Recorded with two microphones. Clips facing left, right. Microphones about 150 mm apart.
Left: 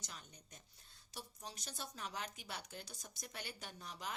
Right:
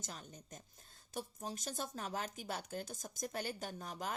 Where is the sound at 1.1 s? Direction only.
45° right (ahead or behind).